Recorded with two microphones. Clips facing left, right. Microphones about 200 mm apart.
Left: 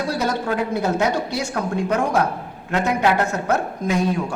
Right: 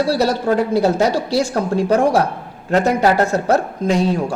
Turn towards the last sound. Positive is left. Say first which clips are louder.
# right 4 dB
turn(degrees=-35)  # may be behind; listen again after turning